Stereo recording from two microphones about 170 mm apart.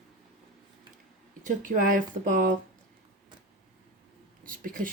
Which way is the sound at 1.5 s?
50° right (ahead or behind).